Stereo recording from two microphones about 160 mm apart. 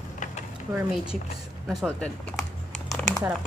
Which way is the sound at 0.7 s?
5° right (ahead or behind).